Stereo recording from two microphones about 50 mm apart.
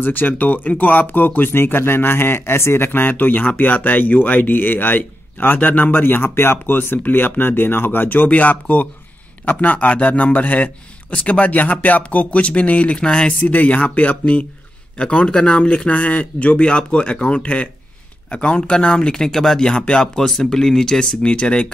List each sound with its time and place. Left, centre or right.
0.0 s speech: left
13.0 s speech: left
13.4 s speech: left
15.0 s speech: left